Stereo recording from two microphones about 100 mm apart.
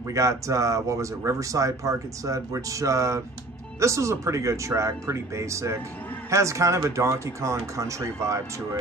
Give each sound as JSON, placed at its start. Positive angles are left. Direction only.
{"t": 0.1, "sound": "speech", "side_deg": -30}